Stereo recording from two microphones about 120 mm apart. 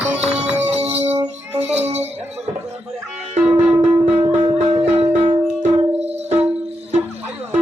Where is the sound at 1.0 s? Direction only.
65° right (ahead or behind).